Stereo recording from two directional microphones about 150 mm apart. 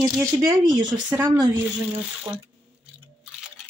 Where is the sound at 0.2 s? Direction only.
30° right (ahead or behind).